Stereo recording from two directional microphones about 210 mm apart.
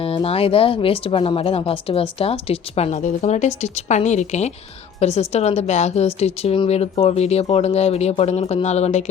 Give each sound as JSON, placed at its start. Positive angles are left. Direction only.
{"t": 0.0, "sound": "a woman's voice", "side_deg": 25}